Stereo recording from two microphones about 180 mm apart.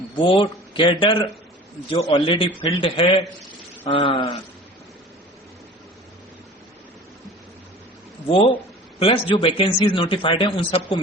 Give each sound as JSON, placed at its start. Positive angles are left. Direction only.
{"t": 0.2, "sound": "a man's voice", "side_deg": 25}
{"t": 9.0, "sound": "a man's voice", "side_deg": 30}